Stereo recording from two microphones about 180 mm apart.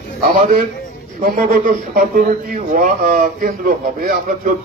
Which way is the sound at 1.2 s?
50° right (ahead or behind).